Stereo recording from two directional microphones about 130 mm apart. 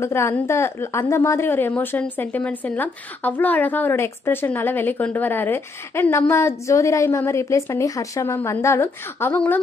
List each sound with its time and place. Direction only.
0.0 s a woman's voice: 20° left (ahead or behind)